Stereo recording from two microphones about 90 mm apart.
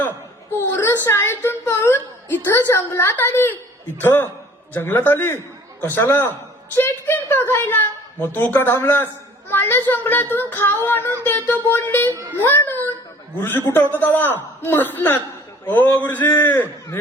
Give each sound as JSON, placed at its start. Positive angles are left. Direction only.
{"t": 0.5, "sound": "a woman's voice", "side_deg": 25}